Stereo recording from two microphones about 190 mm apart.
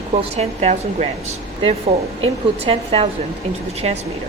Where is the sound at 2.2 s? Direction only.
30° right (ahead or behind).